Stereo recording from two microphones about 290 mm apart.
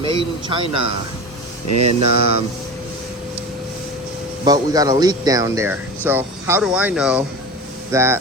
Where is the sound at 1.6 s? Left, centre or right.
Right.